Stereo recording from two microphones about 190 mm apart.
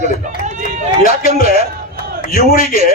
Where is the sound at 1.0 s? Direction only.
45° left (ahead or behind).